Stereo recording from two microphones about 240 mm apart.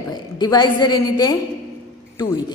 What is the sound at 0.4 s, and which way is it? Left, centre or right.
A woman's voice, centre.